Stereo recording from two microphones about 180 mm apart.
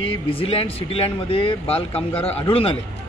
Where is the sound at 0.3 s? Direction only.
30° left (ahead or behind).